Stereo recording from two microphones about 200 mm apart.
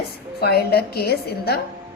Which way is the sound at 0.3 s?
55° left (ahead or behind).